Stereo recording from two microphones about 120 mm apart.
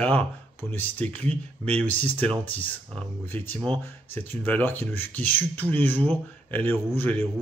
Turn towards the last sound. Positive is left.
turn(degrees=15)  # may be behind; listen again after turning